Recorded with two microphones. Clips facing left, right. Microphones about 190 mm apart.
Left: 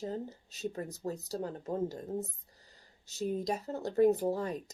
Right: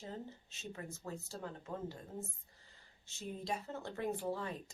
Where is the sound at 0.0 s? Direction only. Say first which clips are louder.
Left 9 dB; 40° left (ahead or behind).